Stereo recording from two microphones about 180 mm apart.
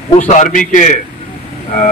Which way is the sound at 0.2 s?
45° left (ahead or behind).